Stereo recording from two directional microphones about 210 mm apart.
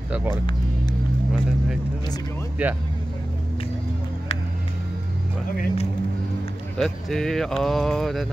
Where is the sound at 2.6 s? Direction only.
5° right (ahead or behind).